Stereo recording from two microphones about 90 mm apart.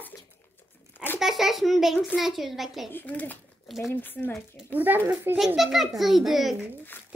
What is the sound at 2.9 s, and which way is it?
Speech, 20° left (ahead or behind).